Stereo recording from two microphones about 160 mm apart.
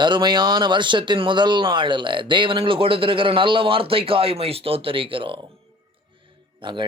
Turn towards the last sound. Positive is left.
turn(degrees=-30)  # may be behind; listen again after turning